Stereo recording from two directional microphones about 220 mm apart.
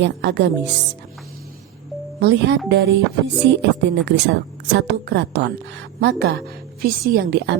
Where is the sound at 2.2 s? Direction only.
50° right (ahead or behind).